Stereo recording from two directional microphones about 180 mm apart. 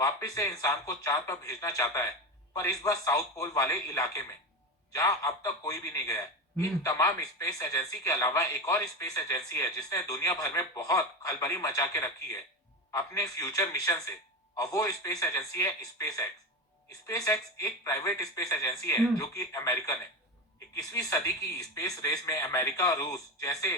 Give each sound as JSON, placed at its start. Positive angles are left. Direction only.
{"t": 0.0, "sound": "a man's voice", "side_deg": 20}